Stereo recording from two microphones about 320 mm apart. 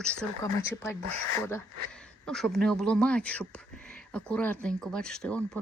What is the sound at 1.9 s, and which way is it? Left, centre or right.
Speech, centre.